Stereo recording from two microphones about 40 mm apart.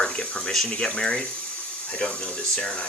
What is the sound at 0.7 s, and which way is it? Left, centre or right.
Speech, centre.